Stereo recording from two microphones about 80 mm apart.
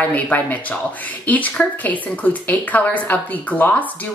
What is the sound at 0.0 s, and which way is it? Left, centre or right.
Speech, left.